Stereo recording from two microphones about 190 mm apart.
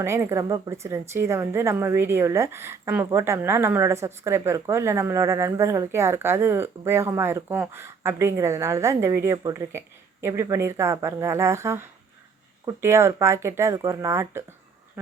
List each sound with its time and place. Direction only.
0.0 s a woman's voice: 15° right (ahead or behind)